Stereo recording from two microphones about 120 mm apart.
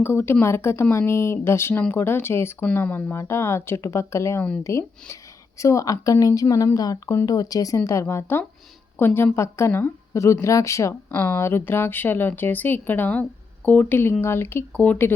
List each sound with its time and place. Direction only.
0.0 s speech: 20° left (ahead or behind)